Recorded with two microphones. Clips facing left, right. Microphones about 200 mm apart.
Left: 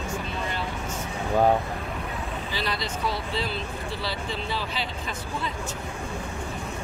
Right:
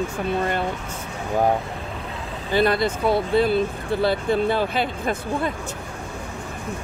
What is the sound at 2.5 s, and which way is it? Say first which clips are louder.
Speech: right 14 dB; 55° right (ahead or behind).